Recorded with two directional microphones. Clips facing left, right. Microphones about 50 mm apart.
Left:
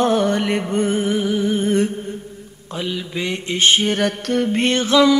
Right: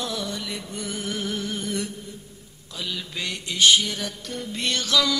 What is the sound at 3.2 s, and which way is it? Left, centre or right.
Music, left.